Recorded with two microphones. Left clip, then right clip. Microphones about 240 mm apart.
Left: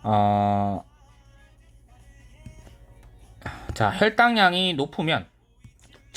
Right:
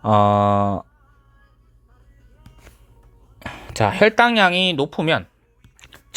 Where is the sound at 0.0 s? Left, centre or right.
Right.